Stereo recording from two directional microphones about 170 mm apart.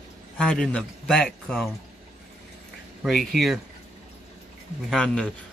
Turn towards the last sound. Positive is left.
turn(degrees=5)  # may be behind; listen again after turning